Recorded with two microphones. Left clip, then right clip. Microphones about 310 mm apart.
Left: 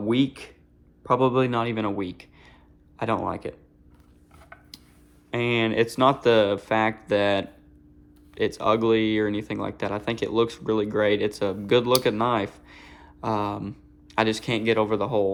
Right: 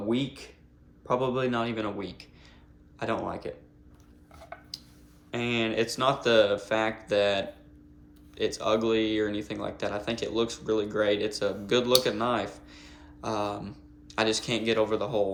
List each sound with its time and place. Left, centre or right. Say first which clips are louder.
0.1 s speech: left 8 dB; left
5.3 s speech: left 5 dB; left